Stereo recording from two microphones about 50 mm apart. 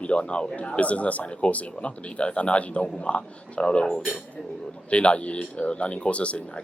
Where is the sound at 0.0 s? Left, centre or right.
Left.